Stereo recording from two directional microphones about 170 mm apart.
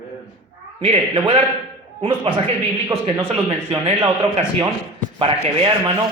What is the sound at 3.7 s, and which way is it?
Speech, 35° right (ahead or behind).